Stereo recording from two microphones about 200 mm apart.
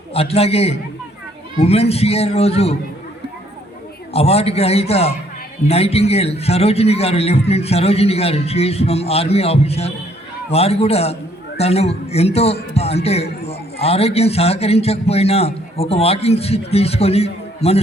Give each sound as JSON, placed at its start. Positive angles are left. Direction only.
{"t": 0.1, "sound": "a man's voice", "side_deg": 30}
{"t": 4.1, "sound": "a man's voice", "side_deg": 30}